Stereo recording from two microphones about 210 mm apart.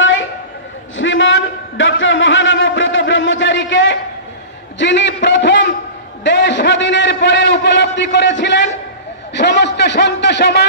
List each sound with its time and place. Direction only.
0.0 s train: 65° left (ahead or behind)
0.9 s a sound: 65° left (ahead or behind)
9.3 s a man's voice: 55° left (ahead or behind)